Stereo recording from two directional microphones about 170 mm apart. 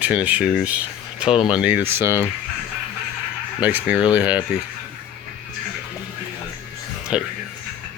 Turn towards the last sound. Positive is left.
turn(degrees=-5)  # may be behind; listen again after turning